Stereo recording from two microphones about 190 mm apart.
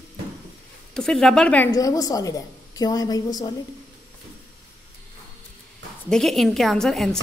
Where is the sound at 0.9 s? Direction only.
5° left (ahead or behind).